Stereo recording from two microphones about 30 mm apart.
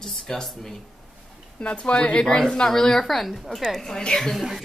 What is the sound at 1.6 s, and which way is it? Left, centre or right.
Speech, left.